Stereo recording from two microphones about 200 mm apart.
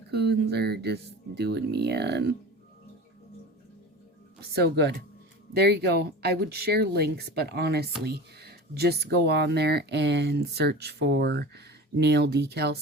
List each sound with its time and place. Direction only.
0.1 s speech: 55° right (ahead or behind)
4.5 s speech: 55° right (ahead or behind)